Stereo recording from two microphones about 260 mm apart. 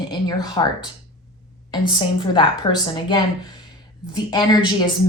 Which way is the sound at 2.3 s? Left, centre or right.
Centre.